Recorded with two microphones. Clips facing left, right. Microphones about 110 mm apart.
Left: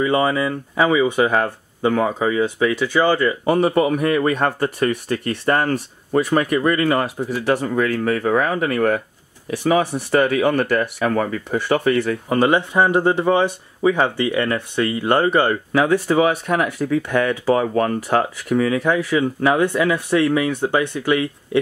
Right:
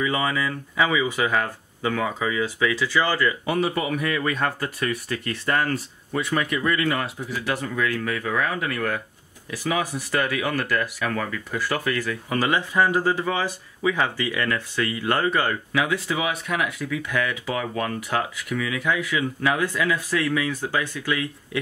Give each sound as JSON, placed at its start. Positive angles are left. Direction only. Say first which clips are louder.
{"t": 0.0, "sound": "speech", "louder": "left 6 dB", "side_deg": 35}
{"t": 2.8, "sound": "speech", "louder": "left 6 dB", "side_deg": 20}
{"t": 3.4, "sound": "speech", "louder": "left 7 dB", "side_deg": 40}
{"t": 11.5, "sound": "speech", "louder": "left 8 dB", "side_deg": 55}
{"t": 12.4, "sound": "speech", "louder": "left 5 dB", "side_deg": 25}
{"t": 15.5, "sound": "speech", "louder": "left 7 dB", "side_deg": 40}